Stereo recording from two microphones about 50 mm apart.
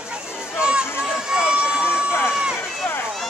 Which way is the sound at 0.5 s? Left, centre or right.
Centre.